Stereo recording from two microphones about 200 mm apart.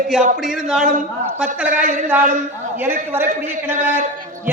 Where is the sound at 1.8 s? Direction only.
40° right (ahead or behind).